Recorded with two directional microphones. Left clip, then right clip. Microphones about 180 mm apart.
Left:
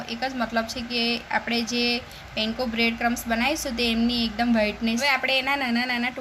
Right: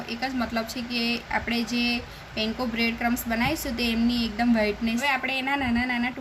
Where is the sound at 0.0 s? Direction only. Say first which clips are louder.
Left 1 dB; 40° left (ahead or behind).